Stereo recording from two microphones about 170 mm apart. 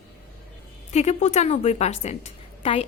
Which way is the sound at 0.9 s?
40° left (ahead or behind).